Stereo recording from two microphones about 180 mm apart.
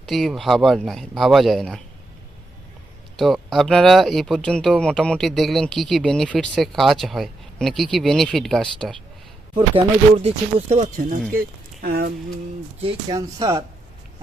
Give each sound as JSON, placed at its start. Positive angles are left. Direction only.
{"t": 0.1, "sound": "speech", "side_deg": 0}
{"t": 3.2, "sound": "speech", "side_deg": 0}
{"t": 9.7, "sound": "speech", "side_deg": -35}
{"t": 11.3, "sound": "speech", "side_deg": -55}
{"t": 12.8, "sound": "speech", "side_deg": -30}
{"t": 13.1, "sound": "speech", "side_deg": -20}